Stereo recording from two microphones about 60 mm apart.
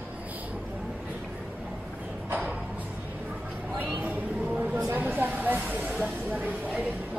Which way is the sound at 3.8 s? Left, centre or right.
Right.